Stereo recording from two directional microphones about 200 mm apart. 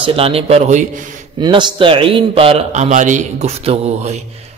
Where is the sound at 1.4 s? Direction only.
25° right (ahead or behind).